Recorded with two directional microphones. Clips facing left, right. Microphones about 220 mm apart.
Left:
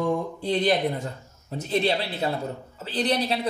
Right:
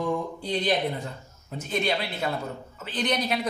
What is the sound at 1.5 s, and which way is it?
A man's voice, 35° left (ahead or behind).